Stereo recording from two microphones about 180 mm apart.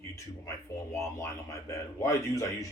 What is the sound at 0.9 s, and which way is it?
Speech, 15° left (ahead or behind).